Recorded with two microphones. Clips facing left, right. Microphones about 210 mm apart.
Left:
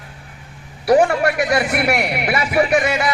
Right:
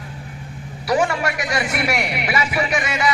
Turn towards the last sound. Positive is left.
turn(degrees=55)  # may be behind; listen again after turning